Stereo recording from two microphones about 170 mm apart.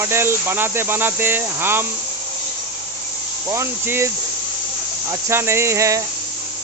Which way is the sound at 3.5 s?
15° right (ahead or behind).